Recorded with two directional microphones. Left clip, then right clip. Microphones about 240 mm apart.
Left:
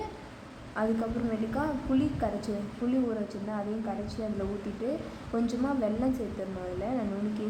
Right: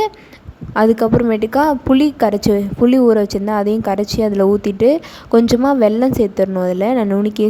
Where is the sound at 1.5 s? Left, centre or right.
Right.